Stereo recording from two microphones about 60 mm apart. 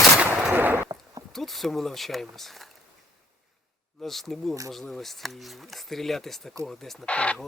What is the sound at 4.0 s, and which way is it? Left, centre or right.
Speech, centre.